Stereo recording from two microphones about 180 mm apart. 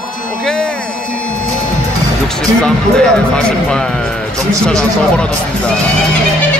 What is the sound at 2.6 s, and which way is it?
A man's voice, 5° left (ahead or behind).